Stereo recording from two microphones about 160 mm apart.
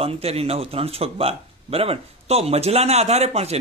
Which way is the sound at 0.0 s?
40° right (ahead or behind).